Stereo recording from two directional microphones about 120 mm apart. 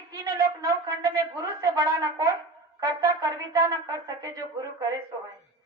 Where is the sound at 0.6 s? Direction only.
25° right (ahead or behind).